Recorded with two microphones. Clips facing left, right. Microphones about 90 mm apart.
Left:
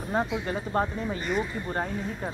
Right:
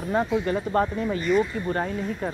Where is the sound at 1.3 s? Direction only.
55° left (ahead or behind).